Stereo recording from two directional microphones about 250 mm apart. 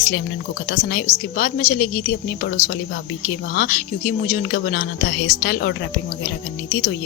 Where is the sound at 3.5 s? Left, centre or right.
Left.